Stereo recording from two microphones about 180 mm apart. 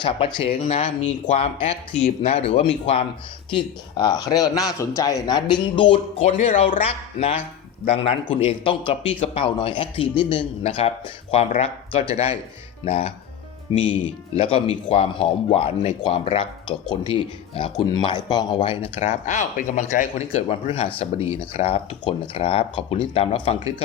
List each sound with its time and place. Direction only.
0.0 s a man's voice: 25° left (ahead or behind)
2.5 s a man's voice: 30° left (ahead or behind)
6.3 s speech: 40° left (ahead or behind)
6.8 s a man's voice: 35° left (ahead or behind)